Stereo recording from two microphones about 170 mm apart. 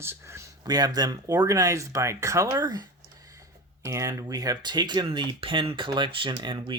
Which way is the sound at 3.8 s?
20° right (ahead or behind).